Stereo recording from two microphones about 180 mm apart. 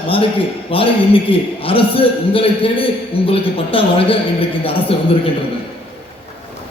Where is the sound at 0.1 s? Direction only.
30° left (ahead or behind).